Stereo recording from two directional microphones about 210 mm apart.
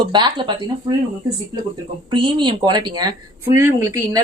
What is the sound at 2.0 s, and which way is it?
A woman's voice, 20° right (ahead or behind).